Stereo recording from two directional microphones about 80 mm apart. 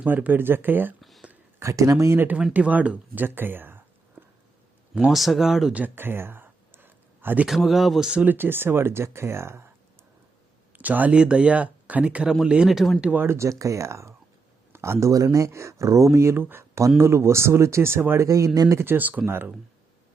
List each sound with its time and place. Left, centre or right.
0.0 s speech: right
1.5 s speech: right
2.1 s speech: right
4.9 s speech: centre
5.7 s a sound: right
7.4 s speech: centre
8.2 s speech: right
10.7 s speech: right; by 13.0 s centre
13.0 s speech: centre
13.2 s speech: right
18.7 s speech: right